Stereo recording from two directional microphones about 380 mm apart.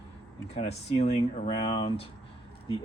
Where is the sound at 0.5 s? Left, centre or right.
Centre.